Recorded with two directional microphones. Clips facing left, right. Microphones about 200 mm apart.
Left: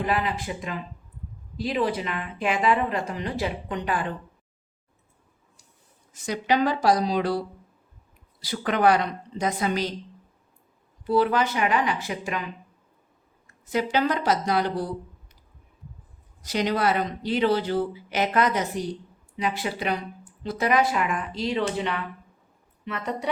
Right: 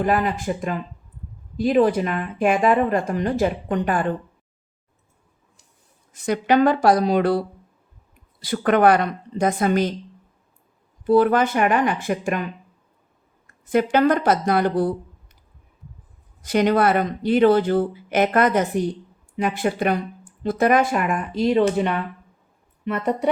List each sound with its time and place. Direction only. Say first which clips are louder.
0.0 s a woman's voice: right 5 dB; 50° right (ahead or behind)
6.1 s a woman's voice: right 6 dB; 55° right (ahead or behind)
11.0 s a woman's voice: right 6 dB; 50° right (ahead or behind)
13.7 s a woman's voice: right 7 dB; 55° right (ahead or behind)
16.4 s a woman's voice: right 7 dB; 55° right (ahead or behind)